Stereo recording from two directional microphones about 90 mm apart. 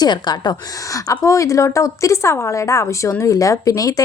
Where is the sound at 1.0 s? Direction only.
35° left (ahead or behind).